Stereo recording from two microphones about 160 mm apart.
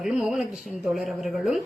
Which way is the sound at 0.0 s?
5° right (ahead or behind).